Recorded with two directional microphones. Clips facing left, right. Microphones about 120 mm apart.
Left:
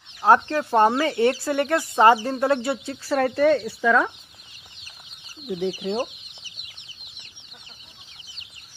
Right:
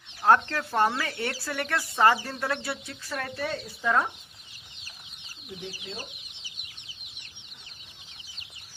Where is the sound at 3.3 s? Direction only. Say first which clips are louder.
Left 16 dB; 55° left (ahead or behind).